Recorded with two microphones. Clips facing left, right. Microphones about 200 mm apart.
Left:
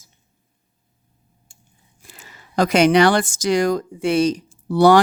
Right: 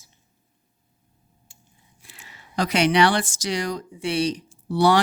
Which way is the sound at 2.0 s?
45° left (ahead or behind).